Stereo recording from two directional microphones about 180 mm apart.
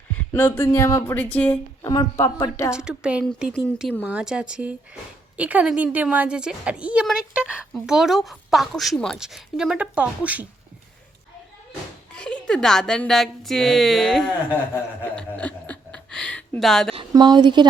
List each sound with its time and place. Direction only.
0.3 s speech: 15° left (ahead or behind)
2.7 s a woman's voice: 5° right (ahead or behind)
12.1 s a woman's voice: 5° left (ahead or behind)
15.0 s a sound: 10° left (ahead or behind)
16.9 s a woman's voice: 25° right (ahead or behind)